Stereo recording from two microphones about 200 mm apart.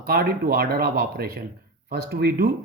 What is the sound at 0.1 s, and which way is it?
Speech, 50° right (ahead or behind).